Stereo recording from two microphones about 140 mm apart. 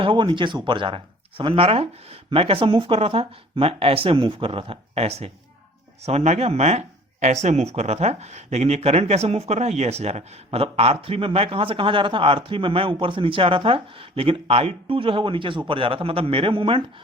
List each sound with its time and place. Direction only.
0.0 s speech: 35° right (ahead or behind)